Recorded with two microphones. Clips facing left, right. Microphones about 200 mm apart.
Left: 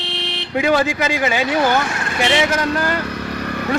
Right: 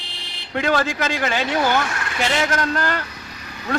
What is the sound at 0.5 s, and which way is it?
Speech, 10° left (ahead or behind).